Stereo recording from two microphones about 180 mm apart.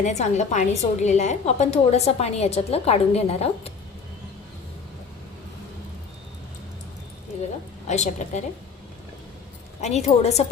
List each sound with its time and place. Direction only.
0.0 s a woman's voice: 40° left (ahead or behind)
7.9 s a woman's voice: 40° left (ahead or behind)
9.8 s a woman's voice: 40° left (ahead or behind)